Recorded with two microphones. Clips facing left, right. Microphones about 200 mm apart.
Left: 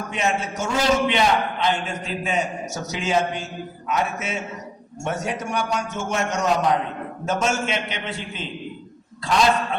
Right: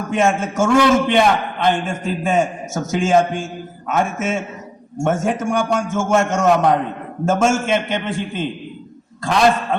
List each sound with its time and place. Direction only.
0.1 s a man's voice: 50° right (ahead or behind)